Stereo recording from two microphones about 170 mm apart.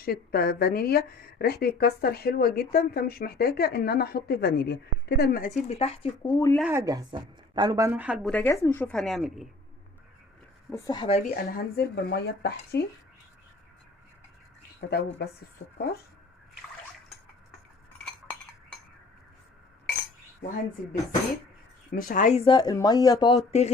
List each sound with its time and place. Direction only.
0.0 s a woman's voice: 60° left (ahead or behind); by 6.1 s 35° left (ahead or behind)
6.2 s speech: 20° left (ahead or behind)
6.7 s speech: 20° right (ahead or behind)
8.3 s a woman's voice: 10° left (ahead or behind)
10.7 s speech: 25° left (ahead or behind)
11.4 s speech: 65° left (ahead or behind)
14.8 s speech: 75° left (ahead or behind)
21.9 s speech: 55° left (ahead or behind); by 23.4 s 20° left (ahead or behind)
23.5 s speech: 40° left (ahead or behind)